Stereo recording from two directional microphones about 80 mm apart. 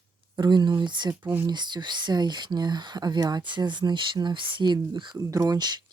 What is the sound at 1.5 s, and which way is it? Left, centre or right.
Speech, right.